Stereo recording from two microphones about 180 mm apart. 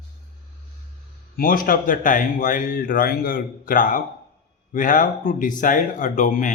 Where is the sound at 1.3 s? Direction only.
50° left (ahead or behind).